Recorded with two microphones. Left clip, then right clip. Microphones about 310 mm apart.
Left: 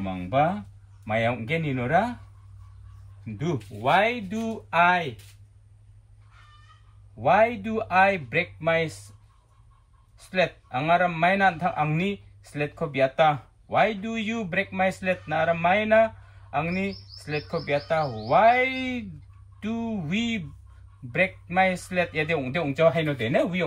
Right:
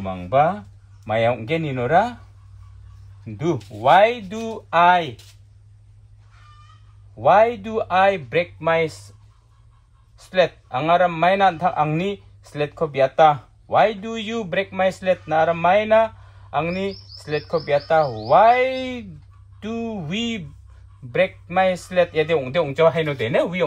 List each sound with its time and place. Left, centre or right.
0.0 s speech: centre
3.5 s speech: centre
7.2 s speech: centre
10.8 s speech: centre